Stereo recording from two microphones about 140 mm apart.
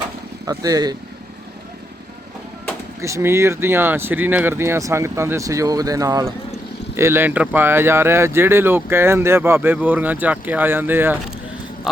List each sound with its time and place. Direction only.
0.4 s speech: 25° right (ahead or behind)
3.0 s speech: 20° right (ahead or behind)